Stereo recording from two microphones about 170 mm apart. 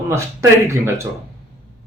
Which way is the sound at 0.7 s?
15° right (ahead or behind).